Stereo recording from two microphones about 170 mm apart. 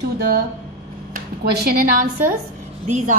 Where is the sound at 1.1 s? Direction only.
60° right (ahead or behind).